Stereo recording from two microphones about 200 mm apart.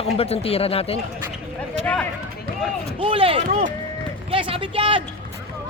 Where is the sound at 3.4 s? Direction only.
40° right (ahead or behind).